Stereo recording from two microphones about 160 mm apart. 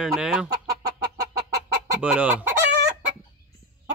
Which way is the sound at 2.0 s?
5° right (ahead or behind).